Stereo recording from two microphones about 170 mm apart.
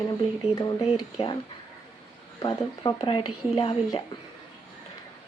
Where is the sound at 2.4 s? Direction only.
25° left (ahead or behind).